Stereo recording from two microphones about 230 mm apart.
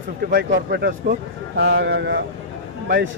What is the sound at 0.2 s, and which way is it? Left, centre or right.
A man's voice, right.